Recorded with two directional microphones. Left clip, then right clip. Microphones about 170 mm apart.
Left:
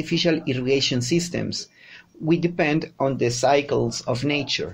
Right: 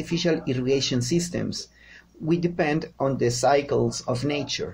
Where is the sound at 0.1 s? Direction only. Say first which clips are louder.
Left 3 dB; 25° left (ahead or behind).